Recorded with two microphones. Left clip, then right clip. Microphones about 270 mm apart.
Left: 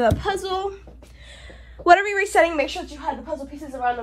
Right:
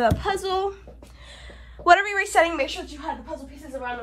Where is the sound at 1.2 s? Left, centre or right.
Centre.